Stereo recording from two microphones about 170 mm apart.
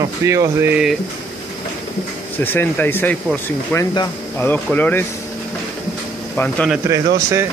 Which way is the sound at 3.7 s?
20° left (ahead or behind).